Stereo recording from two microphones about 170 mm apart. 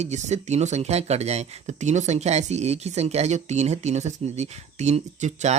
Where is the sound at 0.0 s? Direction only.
40° right (ahead or behind).